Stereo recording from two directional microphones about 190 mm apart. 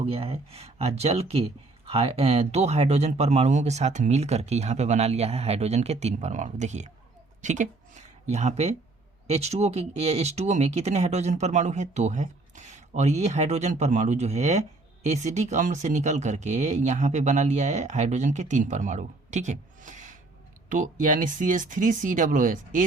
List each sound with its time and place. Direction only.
0.0 s speech: 30° right (ahead or behind)